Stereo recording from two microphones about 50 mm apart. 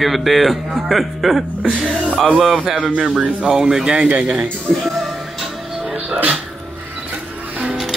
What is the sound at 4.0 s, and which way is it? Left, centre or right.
Speech, right.